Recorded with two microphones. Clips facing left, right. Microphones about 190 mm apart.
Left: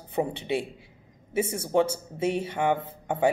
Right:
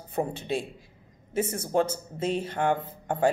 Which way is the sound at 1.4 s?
10° left (ahead or behind).